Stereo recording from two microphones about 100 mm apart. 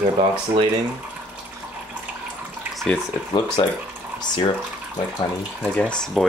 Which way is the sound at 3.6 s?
55° left (ahead or behind).